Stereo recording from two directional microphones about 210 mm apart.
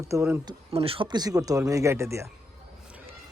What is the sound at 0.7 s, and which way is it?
Speech, 25° right (ahead or behind).